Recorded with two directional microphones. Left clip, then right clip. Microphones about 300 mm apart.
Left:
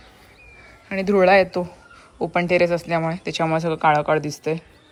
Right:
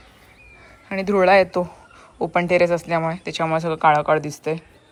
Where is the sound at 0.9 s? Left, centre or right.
Centre.